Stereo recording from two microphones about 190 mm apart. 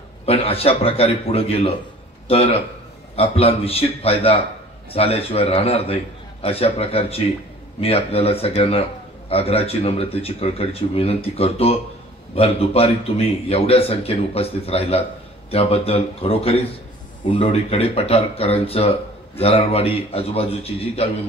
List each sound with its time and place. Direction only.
0.2 s a man's voice: 30° left (ahead or behind)